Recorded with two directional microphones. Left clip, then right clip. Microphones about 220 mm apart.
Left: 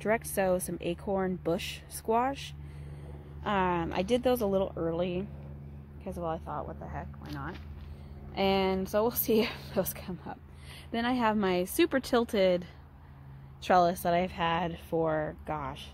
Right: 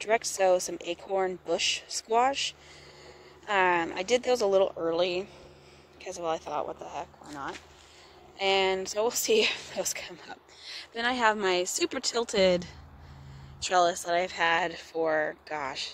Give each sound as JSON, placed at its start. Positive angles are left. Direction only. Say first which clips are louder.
{"t": 0.0, "sound": "speech", "louder": "right 3 dB", "side_deg": -15}
{"t": 7.3, "sound": "a woman's voice", "louder": "right 5 dB", "side_deg": -10}